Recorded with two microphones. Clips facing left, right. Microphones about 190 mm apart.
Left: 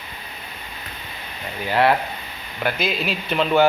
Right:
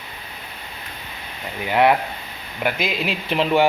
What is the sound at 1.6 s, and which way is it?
Speech, 15° right (ahead or behind).